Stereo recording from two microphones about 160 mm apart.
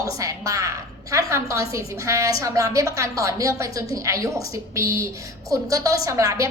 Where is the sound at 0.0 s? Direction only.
20° right (ahead or behind).